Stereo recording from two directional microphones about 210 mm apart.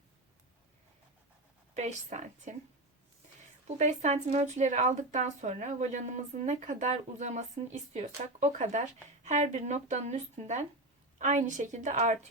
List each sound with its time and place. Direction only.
1.7 s speech: 35° right (ahead or behind)
3.8 s speech: 35° right (ahead or behind)